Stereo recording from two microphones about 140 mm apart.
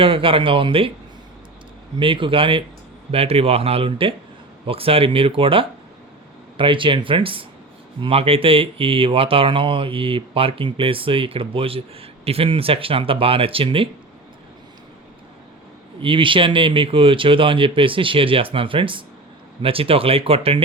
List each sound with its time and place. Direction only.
0.0 s speech: 40° right (ahead or behind)
2.0 s speech: 35° right (ahead or behind)
16.0 s speech: 40° right (ahead or behind)